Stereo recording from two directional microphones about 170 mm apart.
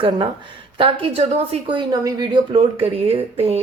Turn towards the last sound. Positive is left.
turn(degrees=-35)  # may be behind; listen again after turning